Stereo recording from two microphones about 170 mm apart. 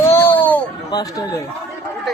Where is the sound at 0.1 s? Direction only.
15° left (ahead or behind).